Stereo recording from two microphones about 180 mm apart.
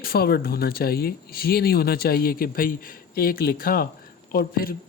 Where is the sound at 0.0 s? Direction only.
55° left (ahead or behind).